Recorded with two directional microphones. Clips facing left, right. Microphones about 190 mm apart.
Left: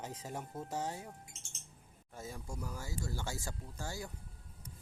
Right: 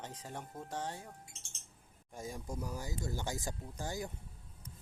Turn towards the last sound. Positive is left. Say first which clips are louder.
# right 3 dB
turn(degrees=-15)  # may be behind; listen again after turning